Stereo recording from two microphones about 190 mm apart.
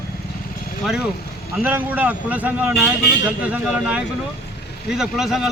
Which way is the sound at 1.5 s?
10° right (ahead or behind).